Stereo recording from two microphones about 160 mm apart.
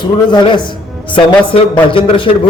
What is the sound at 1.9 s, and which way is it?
Speech, 35° left (ahead or behind).